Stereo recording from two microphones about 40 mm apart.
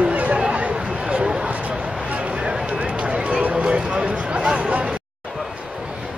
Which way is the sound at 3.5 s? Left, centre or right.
Right.